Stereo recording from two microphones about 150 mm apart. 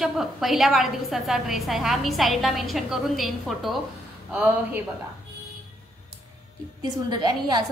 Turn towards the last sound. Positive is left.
turn(degrees=-30)  # may be behind; listen again after turning